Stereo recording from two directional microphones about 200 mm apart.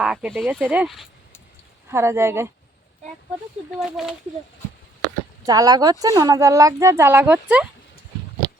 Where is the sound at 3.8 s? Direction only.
Centre (ahead or behind).